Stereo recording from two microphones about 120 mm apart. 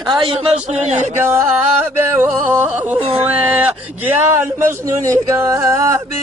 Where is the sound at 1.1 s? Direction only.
20° right (ahead or behind).